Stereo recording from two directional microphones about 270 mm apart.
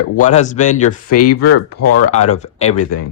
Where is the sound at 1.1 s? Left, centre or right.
Left.